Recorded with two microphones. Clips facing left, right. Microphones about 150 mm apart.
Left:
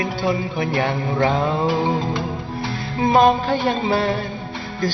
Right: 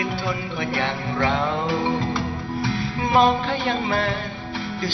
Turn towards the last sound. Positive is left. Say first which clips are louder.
# left 4 dB
turn(degrees=35)  # may be behind; listen again after turning